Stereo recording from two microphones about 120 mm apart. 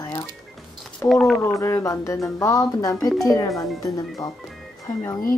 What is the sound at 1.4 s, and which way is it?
Speech, 25° left (ahead or behind).